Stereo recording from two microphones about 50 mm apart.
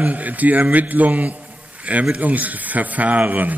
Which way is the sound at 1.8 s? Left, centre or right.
Right.